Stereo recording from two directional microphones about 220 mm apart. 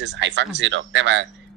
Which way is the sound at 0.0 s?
55° right (ahead or behind).